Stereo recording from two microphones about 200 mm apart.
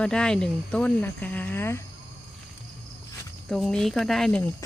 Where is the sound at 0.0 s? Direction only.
5° left (ahead or behind).